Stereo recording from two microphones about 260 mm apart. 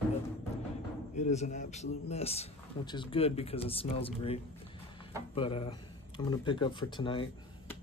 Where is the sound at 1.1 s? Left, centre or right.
Left.